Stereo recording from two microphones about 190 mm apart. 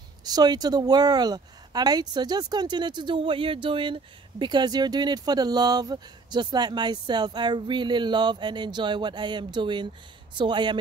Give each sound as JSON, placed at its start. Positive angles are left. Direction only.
{"t": 0.2, "sound": "speech", "side_deg": -20}